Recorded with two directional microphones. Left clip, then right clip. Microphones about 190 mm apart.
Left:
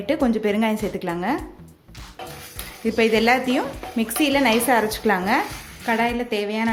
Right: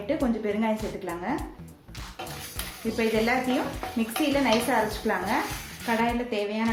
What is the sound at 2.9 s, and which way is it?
Speech, 55° left (ahead or behind).